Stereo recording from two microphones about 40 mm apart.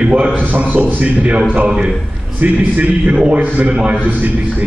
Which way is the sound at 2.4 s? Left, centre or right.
Right.